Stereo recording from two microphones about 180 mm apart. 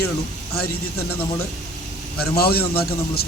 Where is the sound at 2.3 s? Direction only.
60° left (ahead or behind).